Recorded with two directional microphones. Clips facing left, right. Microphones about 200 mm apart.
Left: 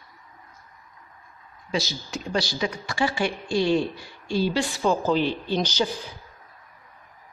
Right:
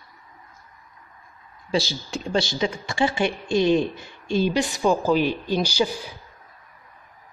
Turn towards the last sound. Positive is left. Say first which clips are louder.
# right 2 dB
turn(degrees=-10)  # may be behind; listen again after turning